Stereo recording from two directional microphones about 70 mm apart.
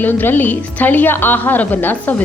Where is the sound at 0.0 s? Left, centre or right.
Left.